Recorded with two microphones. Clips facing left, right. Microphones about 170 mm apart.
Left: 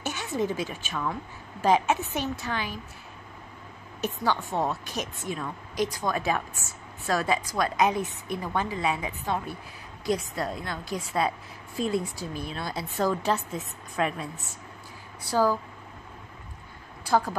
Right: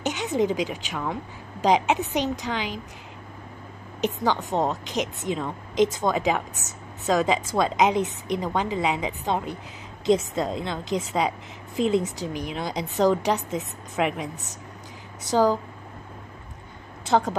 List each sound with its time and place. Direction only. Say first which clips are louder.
0.0 s a woman's voice: right 5 dB; 20° right (ahead or behind)
4.0 s a woman's voice: right 4 dB; 20° right (ahead or behind)
17.0 s a woman's voice: right 3 dB; 20° right (ahead or behind)